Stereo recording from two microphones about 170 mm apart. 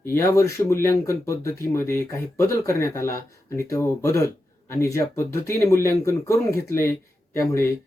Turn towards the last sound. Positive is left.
turn(degrees=15)  # may be behind; listen again after turning